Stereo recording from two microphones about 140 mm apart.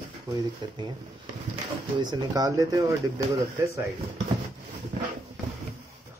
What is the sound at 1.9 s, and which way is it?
Speech, 30° right (ahead or behind).